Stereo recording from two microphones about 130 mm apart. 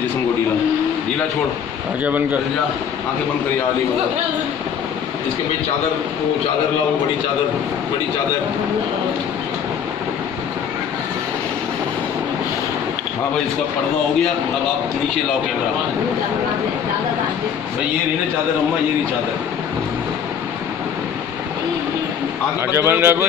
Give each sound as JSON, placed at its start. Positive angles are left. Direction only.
{"t": 22.7, "sound": "a man's voice", "side_deg": -20}